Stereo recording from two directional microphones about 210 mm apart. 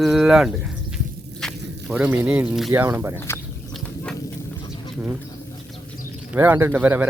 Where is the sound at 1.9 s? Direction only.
10° right (ahead or behind).